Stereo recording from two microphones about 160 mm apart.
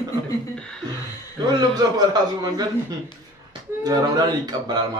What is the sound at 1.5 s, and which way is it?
A man's voice, 25° right (ahead or behind).